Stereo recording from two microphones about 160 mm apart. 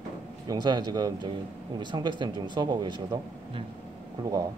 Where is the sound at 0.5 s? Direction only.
25° right (ahead or behind).